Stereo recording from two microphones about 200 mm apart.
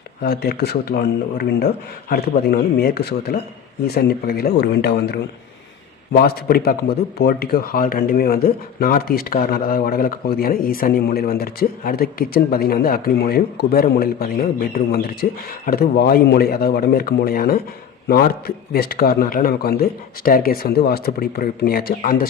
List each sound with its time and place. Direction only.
0.2 s speech: 50° left (ahead or behind)
6.1 s speech: 50° left (ahead or behind)